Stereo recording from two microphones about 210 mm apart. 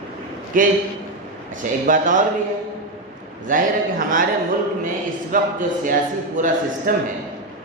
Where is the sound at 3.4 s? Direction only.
40° right (ahead or behind).